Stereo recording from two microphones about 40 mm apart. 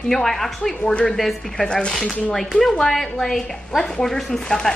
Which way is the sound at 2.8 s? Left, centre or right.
Centre.